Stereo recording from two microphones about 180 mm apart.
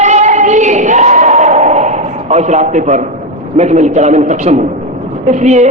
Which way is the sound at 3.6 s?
40° right (ahead or behind).